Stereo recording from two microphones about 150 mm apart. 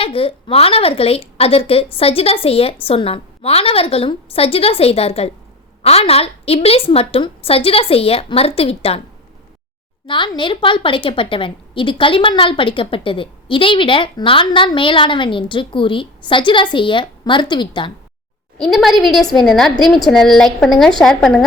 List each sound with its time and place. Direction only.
0.0 s a woman's voice: 40° left (ahead or behind)
10.1 s a woman's voice: 30° left (ahead or behind)
18.5 s a woman's voice: centre (ahead or behind)